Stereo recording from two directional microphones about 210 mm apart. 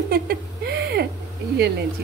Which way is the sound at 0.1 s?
50° right (ahead or behind).